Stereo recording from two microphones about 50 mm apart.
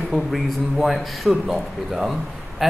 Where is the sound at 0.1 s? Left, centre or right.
Centre.